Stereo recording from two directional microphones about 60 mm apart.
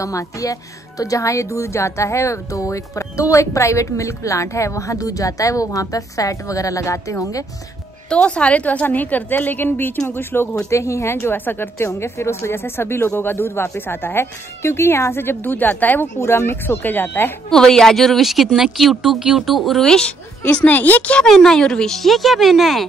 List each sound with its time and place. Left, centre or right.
0.0 s speech: left
8.1 s a woman's voice: centre; by 10.5 s left
10.5 s a woman's voice: left
12.0 s speech: left
16.2 s speech: left
17.5 s a woman's voice: centre
20.4 s a woman's voice: left
21.3 s a woman's voice: centre